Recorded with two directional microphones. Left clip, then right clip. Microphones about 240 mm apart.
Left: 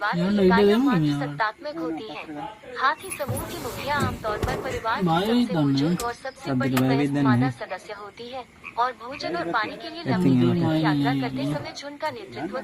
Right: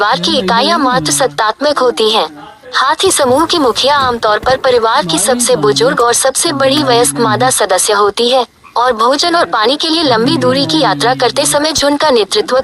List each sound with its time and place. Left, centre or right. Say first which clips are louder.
0.0 s a woman's voice: right 11 dB; right